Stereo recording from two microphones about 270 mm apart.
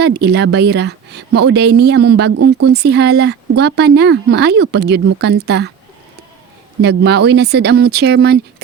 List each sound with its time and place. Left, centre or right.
0.0 s speech: right
6.8 s speech: right